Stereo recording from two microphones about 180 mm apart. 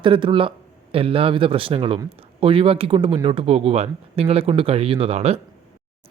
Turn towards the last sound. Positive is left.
turn(degrees=-35)  # may be behind; listen again after turning